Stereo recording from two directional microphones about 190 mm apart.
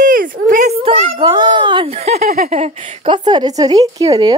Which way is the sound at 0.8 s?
30° right (ahead or behind).